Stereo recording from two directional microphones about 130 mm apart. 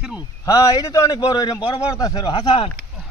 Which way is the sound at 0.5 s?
30° left (ahead or behind).